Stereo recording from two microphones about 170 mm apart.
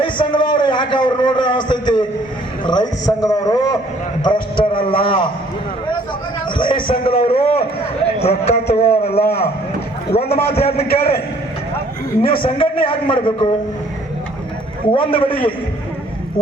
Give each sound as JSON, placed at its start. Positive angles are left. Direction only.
{"t": 0.0, "sound": "a man's voice", "side_deg": 30}
{"t": 6.6, "sound": "a man's voice", "side_deg": 30}
{"t": 12.2, "sound": "a man's voice", "side_deg": 30}
{"t": 14.9, "sound": "a man's voice", "side_deg": 30}